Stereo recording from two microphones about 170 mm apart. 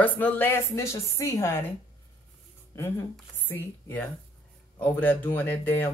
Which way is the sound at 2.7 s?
15° left (ahead or behind).